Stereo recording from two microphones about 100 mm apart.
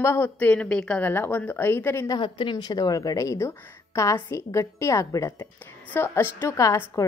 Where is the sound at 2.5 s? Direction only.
40° left (ahead or behind).